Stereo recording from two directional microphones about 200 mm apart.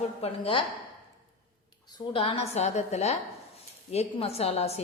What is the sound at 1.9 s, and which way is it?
A woman's voice, 25° left (ahead or behind).